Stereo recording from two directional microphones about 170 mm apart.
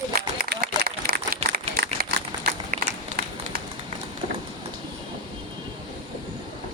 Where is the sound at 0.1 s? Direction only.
60° right (ahead or behind).